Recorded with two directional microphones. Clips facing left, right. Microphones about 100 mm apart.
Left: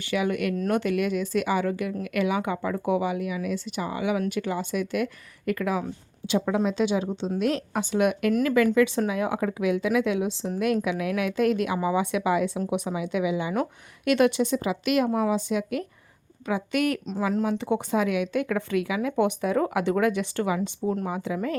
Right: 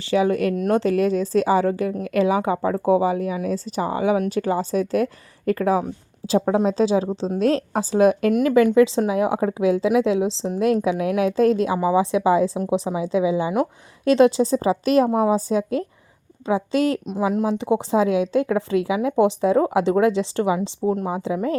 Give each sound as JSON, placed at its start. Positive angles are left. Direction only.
{"t": 0.0, "sound": "a woman's voice", "side_deg": -30}
{"t": 17.1, "sound": "speech", "side_deg": -15}
{"t": 17.4, "sound": "speech", "side_deg": -30}